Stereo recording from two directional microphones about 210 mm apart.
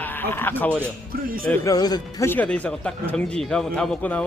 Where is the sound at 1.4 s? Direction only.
15° left (ahead or behind).